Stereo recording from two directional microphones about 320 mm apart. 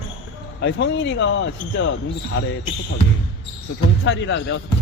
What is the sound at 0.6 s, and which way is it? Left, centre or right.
Speech, left.